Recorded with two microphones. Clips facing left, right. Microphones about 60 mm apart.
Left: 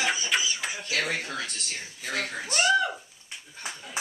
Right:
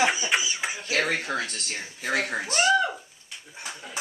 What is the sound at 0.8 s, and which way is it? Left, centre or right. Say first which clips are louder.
Speech: right 4 dB; right.